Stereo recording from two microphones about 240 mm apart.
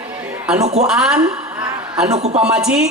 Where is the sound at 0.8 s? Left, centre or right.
Centre.